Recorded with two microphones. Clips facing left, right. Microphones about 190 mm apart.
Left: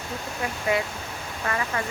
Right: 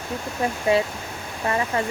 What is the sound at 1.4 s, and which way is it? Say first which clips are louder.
Speech: right 5 dB; 25° right (ahead or behind).